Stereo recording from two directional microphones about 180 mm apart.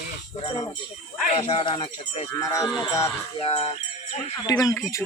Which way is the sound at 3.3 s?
25° left (ahead or behind).